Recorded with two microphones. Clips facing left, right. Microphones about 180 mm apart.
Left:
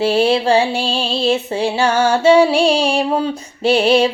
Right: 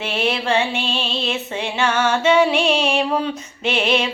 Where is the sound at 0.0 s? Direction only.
35° left (ahead or behind).